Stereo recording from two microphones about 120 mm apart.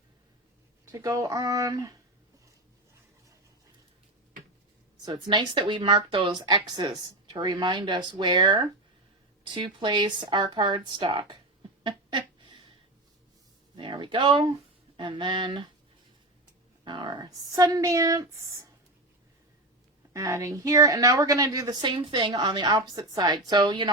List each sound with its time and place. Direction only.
0.9 s a woman's voice: 25° right (ahead or behind)
5.0 s a woman's voice: 40° right (ahead or behind)
11.8 s a sound: 40° right (ahead or behind)
13.7 s a sound: 40° right (ahead or behind)
14.9 s a woman's voice: 40° right (ahead or behind)
16.8 s a woman's voice: 40° right (ahead or behind)
20.1 s a woman's voice: 25° right (ahead or behind)